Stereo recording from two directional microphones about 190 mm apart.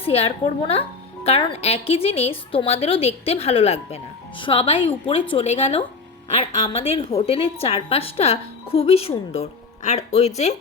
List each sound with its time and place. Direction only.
0.0 s speech: 30° left (ahead or behind)